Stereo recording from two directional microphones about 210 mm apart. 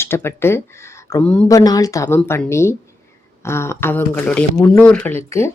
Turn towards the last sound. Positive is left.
turn(degrees=10)  # may be behind; listen again after turning